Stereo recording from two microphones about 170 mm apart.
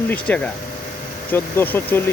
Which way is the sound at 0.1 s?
5° left (ahead or behind).